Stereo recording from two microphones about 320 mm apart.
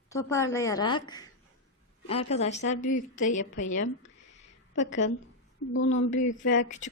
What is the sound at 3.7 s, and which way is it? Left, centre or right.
Speech, left.